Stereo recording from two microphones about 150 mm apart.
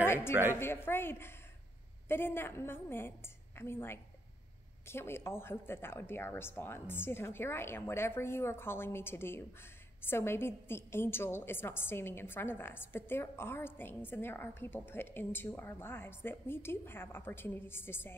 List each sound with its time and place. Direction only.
0.0 s a woman's voice: 15° left (ahead or behind)